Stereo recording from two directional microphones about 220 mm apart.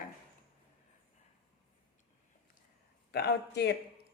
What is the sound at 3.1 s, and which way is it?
Speech, 50° left (ahead or behind).